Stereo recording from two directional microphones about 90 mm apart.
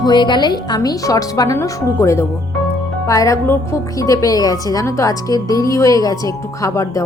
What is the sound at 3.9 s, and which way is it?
Speech, 40° left (ahead or behind).